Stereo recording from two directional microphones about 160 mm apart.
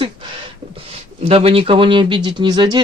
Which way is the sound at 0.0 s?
35° right (ahead or behind).